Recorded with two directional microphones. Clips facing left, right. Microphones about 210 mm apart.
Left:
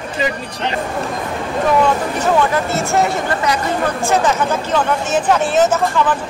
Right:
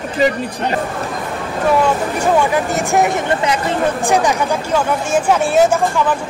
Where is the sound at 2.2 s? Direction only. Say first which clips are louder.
Right 2 dB; 15° right (ahead or behind).